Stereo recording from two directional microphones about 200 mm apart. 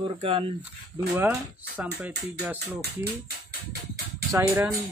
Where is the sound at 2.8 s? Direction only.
50° right (ahead or behind).